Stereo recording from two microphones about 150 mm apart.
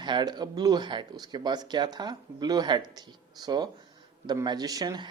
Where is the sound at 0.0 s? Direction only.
30° right (ahead or behind).